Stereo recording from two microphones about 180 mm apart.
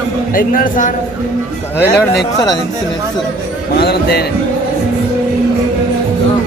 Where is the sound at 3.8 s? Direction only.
60° left (ahead or behind).